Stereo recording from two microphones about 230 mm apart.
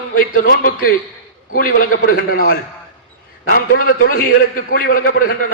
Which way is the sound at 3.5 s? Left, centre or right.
Left.